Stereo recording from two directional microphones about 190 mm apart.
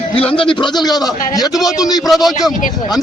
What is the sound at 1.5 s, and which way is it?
Speech, centre (ahead or behind).